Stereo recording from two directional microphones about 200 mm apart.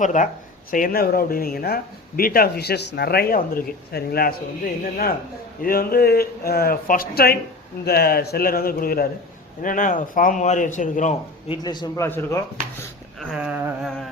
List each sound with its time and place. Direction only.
0.0 s a man's voice: 40° left (ahead or behind)
5.6 s a man's voice: 50° left (ahead or behind)
11.5 s speech: 20° left (ahead or behind)
13.1 s a sound: centre (ahead or behind)